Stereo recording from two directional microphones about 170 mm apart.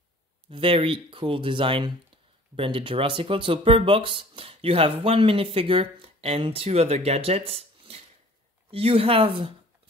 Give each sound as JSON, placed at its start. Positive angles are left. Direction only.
{"t": 0.5, "sound": "speech", "side_deg": -30}